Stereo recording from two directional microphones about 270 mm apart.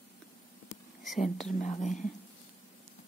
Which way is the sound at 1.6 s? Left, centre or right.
Left.